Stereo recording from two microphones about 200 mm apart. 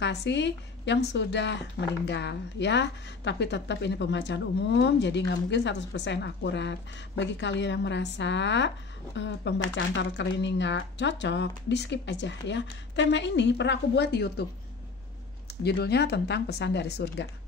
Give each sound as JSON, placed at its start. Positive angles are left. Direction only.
{"t": 0.0, "sound": "a woman's voice", "side_deg": 60}
{"t": 15.6, "sound": "a woman's voice", "side_deg": 55}